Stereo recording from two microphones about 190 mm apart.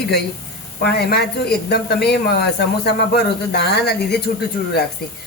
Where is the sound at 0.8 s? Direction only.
55° left (ahead or behind).